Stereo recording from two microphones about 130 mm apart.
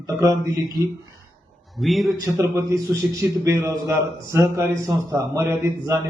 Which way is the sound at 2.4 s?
20° right (ahead or behind).